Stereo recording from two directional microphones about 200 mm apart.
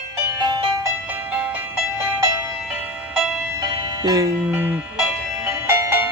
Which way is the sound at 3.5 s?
20° right (ahead or behind).